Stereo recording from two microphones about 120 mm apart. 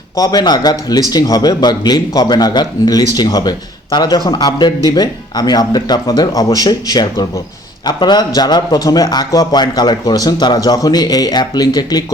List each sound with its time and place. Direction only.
0.2 s speech: 35° left (ahead or behind)